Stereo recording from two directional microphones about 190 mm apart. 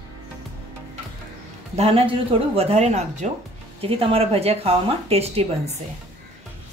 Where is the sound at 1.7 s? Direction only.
30° right (ahead or behind).